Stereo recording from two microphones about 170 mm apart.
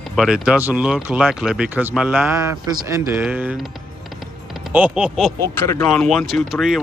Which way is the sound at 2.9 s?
15° right (ahead or behind).